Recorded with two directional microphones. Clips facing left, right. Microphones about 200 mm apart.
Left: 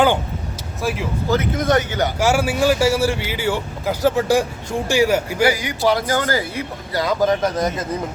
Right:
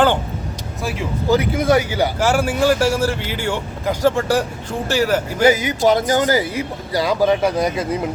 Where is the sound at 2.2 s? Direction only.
10° left (ahead or behind).